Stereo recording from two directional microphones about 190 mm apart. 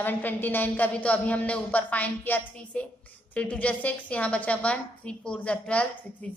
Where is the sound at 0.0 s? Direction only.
10° left (ahead or behind).